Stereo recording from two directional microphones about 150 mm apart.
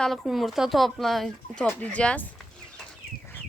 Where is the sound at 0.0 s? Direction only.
Centre (ahead or behind).